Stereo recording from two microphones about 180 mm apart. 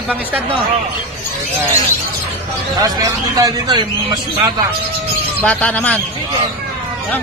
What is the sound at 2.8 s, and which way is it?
Speech, 20° right (ahead or behind).